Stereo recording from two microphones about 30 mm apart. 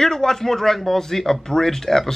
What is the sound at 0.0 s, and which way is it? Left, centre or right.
Speech, centre.